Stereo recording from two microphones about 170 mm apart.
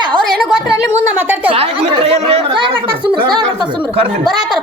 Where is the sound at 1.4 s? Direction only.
35° right (ahead or behind).